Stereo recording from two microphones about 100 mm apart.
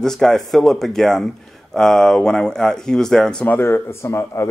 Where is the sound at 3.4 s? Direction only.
20° left (ahead or behind).